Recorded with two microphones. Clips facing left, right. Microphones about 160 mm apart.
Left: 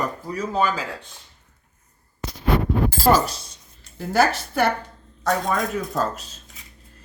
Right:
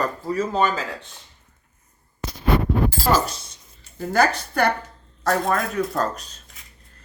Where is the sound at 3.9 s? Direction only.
5° left (ahead or behind).